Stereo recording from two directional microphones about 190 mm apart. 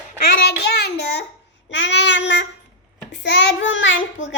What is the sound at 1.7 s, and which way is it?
A child's voice, 70° left (ahead or behind).